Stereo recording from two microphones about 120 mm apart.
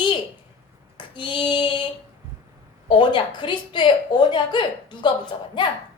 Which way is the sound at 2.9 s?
40° left (ahead or behind).